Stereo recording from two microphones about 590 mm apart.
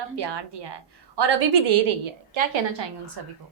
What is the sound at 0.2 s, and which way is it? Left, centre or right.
A woman's voice, right.